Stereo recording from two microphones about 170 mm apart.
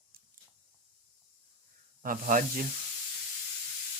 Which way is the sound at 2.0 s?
50° right (ahead or behind).